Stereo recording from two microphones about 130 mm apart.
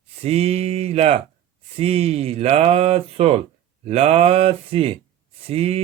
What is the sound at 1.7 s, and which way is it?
Speech, 50° right (ahead or behind).